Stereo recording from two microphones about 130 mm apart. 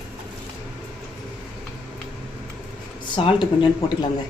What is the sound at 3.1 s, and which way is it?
Speech, 40° left (ahead or behind).